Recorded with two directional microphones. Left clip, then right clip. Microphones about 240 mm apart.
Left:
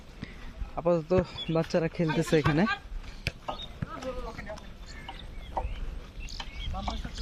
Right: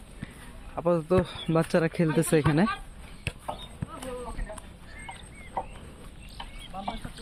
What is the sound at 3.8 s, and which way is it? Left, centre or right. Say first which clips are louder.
Clip-clop: left 1 dB; left.